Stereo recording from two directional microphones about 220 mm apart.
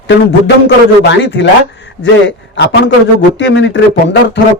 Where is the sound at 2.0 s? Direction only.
55° left (ahead or behind).